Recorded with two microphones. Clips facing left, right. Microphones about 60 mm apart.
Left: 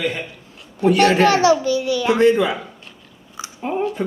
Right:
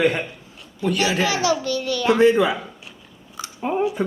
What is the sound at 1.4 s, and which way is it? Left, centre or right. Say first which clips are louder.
Speech: left 6 dB; left.